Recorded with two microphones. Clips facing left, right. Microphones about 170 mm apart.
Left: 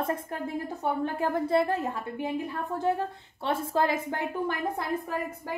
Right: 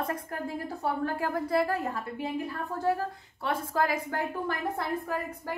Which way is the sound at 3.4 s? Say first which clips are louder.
Left 2 dB; 25° left (ahead or behind).